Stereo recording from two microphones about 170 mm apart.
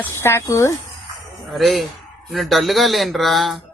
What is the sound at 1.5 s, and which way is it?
Speech, centre (ahead or behind).